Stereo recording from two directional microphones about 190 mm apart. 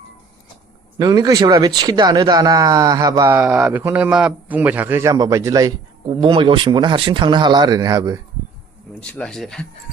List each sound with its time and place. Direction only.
0.9 s speech: 20° right (ahead or behind)
9.0 s speech: 5° left (ahead or behind)